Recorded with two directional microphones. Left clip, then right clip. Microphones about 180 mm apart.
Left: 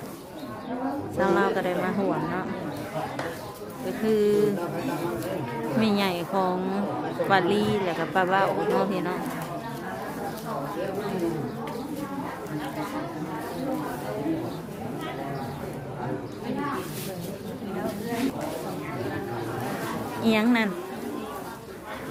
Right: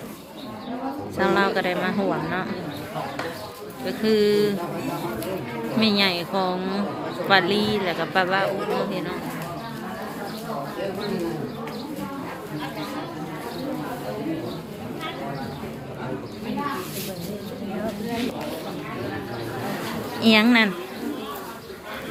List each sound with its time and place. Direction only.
1.2 s speech: 10° left (ahead or behind)
4.0 s speech: 10° left (ahead or behind)
5.8 s speech: 15° left (ahead or behind)
8.9 s speech: 35° left (ahead or behind)
20.2 s speech: centre (ahead or behind)